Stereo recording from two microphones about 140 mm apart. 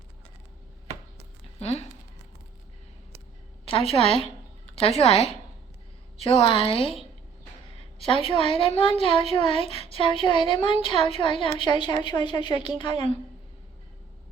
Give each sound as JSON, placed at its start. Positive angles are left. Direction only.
{"t": 1.5, "sound": "speech", "side_deg": 50}
{"t": 3.7, "sound": "a woman's voice", "side_deg": 40}